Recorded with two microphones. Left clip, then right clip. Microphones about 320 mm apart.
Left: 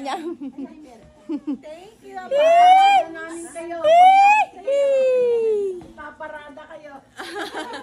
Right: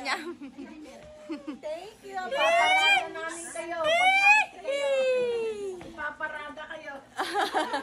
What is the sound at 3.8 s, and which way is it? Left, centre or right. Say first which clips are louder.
Whimper: left 11 dB; left.